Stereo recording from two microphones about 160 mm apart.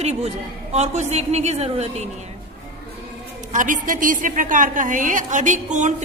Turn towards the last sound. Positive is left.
turn(degrees=-50)  # may be behind; listen again after turning